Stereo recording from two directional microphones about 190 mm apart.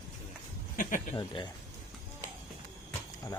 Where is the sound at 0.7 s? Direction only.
45° left (ahead or behind).